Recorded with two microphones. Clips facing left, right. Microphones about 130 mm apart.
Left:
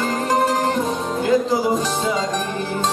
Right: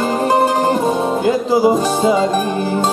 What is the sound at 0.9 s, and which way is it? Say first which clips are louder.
Music: right 7 dB; 55° right (ahead or behind).